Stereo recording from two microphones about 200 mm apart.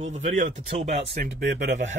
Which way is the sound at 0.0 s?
35° right (ahead or behind).